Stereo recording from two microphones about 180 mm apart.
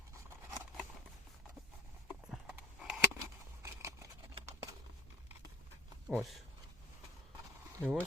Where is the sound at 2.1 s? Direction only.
5° right (ahead or behind).